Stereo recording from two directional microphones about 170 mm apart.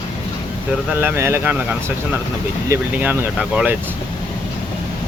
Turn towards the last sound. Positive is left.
turn(degrees=-10)  # may be behind; listen again after turning